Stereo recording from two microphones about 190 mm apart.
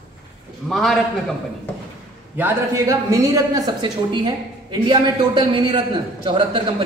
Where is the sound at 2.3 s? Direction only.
15° right (ahead or behind).